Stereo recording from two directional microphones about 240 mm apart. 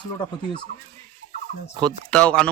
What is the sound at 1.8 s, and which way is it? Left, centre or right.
Speech, centre.